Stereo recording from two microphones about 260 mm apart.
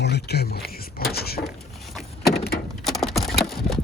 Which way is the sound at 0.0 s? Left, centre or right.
Left.